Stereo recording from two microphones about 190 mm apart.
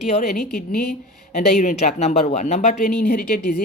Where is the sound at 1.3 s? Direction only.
40° left (ahead or behind).